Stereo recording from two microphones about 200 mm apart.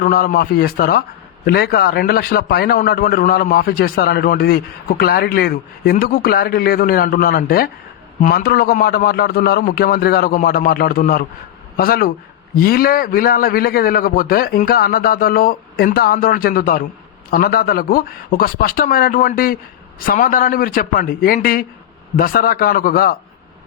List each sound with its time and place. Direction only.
0.0 s a man's voice: 45° left (ahead or behind)